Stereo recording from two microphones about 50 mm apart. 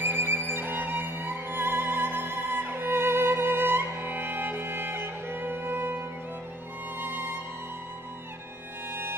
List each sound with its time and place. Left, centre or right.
0.0 s music: right